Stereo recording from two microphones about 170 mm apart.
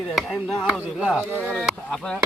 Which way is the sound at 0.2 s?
Centre (ahead or behind).